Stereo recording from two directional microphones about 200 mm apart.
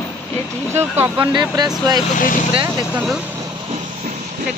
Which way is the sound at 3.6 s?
35° right (ahead or behind).